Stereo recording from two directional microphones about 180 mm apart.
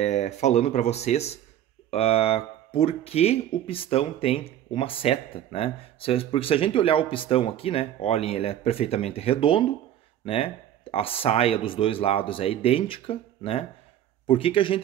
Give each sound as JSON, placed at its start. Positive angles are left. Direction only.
{"t": 0.0, "sound": "a man's voice", "side_deg": 40}